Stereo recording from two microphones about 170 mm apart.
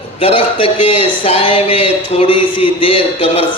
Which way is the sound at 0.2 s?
35° left (ahead or behind).